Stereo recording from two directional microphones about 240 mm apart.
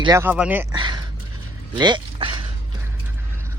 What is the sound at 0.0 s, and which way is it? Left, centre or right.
Speech, centre.